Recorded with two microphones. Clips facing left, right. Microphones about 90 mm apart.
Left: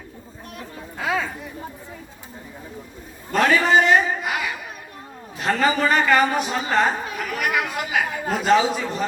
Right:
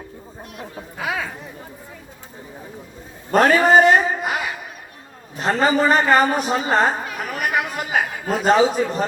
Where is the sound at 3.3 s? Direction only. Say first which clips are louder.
Right 4 dB; 40° right (ahead or behind).